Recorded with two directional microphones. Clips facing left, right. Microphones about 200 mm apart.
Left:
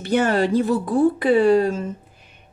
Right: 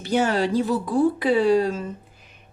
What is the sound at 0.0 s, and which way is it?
A woman's voice, 55° left (ahead or behind).